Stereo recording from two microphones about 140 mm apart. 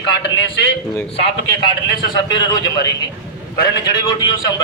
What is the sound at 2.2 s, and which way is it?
Speech, 30° left (ahead or behind).